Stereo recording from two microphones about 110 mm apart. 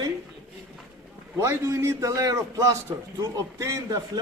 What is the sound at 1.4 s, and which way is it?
A man's voice, 25° right (ahead or behind).